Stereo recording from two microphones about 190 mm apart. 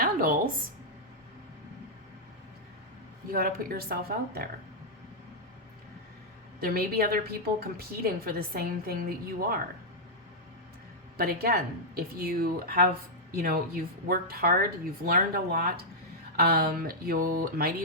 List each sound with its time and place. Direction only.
0.0 s a woman's voice: 50° right (ahead or behind)
3.3 s a woman's voice: 50° right (ahead or behind)
6.6 s a woman's voice: 55° right (ahead or behind)
11.2 s a woman's voice: 55° right (ahead or behind)